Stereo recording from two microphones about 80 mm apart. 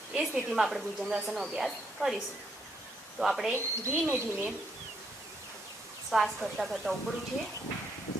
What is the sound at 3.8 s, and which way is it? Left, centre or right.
Speech, right.